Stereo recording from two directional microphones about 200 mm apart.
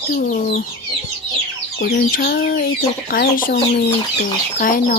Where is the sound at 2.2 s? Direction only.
50° left (ahead or behind).